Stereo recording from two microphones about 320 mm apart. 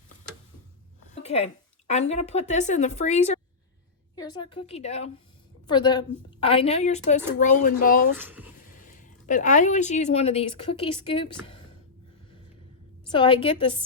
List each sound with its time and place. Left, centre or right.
1.1 s a sound: centre
1.9 s a woman's voice: left
8.1 s speech: centre
8.9 s a woman's voice: left
13.1 s a woman's voice: centre